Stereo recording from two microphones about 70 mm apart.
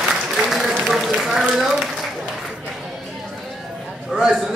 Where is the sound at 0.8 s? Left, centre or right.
Centre.